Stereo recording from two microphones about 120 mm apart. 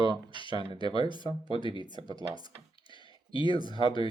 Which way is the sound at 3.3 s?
45° left (ahead or behind).